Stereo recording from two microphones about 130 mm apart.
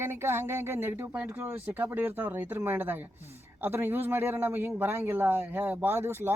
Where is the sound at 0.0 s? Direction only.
20° right (ahead or behind).